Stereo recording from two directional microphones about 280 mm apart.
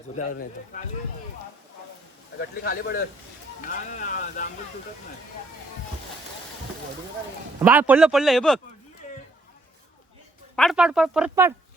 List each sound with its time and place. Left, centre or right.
0.2 s speech: left
2.4 s speech: left
7.6 s a man's voice: centre
10.5 s a man's voice: centre